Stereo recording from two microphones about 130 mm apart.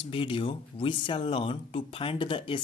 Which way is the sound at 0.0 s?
45° left (ahead or behind).